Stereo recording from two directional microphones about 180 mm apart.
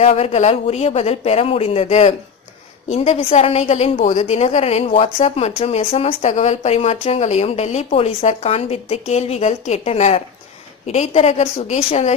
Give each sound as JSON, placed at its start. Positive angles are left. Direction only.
{"t": 0.0, "sound": "a woman's voice", "side_deg": 35}